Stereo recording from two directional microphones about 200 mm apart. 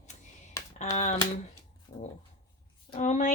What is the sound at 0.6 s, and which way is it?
Computer keyboard, 15° left (ahead or behind).